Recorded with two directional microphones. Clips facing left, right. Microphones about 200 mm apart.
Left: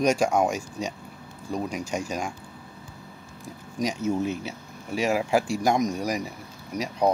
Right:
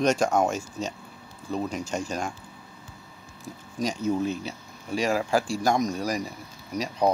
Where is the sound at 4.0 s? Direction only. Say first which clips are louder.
Right 2 dB; 10° left (ahead or behind).